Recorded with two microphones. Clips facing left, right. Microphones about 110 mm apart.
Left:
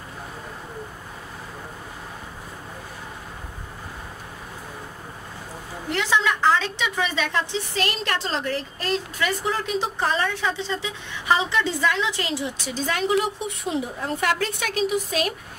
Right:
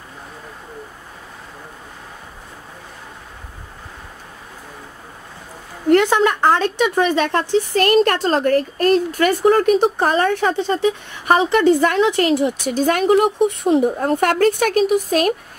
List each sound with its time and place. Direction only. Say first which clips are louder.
5.9 s a woman's voice: right 9 dB; 50° right (ahead or behind)